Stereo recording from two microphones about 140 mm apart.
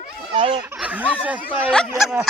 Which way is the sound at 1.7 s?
Centre (ahead or behind).